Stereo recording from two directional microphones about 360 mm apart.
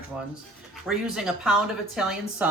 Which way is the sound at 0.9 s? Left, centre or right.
Centre.